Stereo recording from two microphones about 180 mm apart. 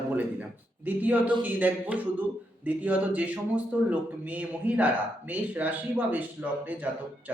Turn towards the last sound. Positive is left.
turn(degrees=-10)  # may be behind; listen again after turning